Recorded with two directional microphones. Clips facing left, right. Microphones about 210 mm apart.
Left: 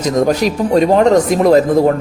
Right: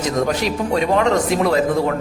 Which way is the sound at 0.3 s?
40° left (ahead or behind).